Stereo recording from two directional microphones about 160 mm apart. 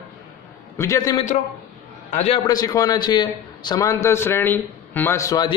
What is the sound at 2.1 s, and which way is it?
Speech, 45° left (ahead or behind).